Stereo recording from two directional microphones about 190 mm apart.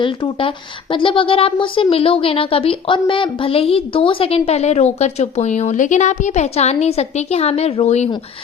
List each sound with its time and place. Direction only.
0.9 s a woman's voice: 25° left (ahead or behind)